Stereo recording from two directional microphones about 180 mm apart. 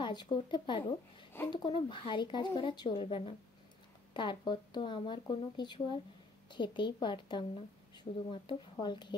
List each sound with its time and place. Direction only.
0.0 s a woman's voice: 25° left (ahead or behind)